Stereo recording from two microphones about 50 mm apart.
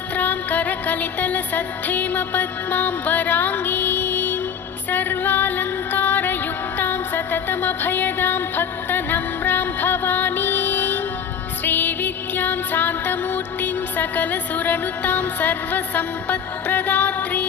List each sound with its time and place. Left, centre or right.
0.2 s music: left